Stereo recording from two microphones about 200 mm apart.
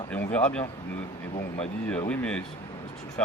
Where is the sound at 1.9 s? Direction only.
10° left (ahead or behind).